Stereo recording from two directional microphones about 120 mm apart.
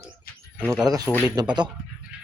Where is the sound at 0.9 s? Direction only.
35° right (ahead or behind).